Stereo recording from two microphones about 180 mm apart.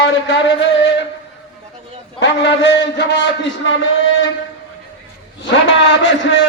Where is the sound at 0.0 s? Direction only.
75° left (ahead or behind).